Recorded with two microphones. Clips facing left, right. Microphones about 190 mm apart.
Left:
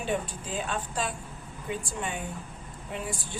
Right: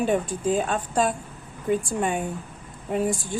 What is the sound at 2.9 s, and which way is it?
Speech, 45° right (ahead or behind).